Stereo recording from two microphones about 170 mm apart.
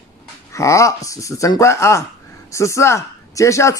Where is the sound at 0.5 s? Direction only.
20° left (ahead or behind).